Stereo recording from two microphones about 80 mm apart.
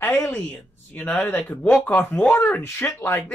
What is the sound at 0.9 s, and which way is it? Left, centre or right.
A man's voice, centre.